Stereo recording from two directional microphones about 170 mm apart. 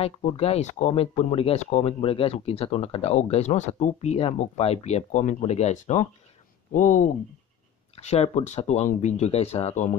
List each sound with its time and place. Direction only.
0.0 s speech: 35° left (ahead or behind)
7.9 s speech: 40° left (ahead or behind)